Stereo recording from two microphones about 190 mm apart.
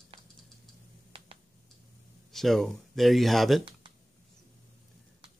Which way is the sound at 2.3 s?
Centre (ahead or behind).